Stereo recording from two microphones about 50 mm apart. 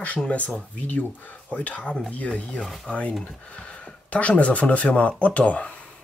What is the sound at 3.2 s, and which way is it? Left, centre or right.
Speech, left.